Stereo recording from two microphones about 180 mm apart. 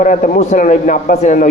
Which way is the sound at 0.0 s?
45° left (ahead or behind).